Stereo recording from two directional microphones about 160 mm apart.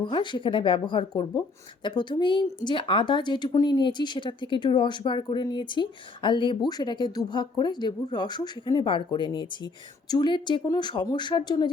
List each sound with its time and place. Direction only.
0.0 s speech: 30° left (ahead or behind)